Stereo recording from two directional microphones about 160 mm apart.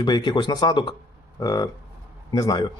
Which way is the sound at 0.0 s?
30° left (ahead or behind).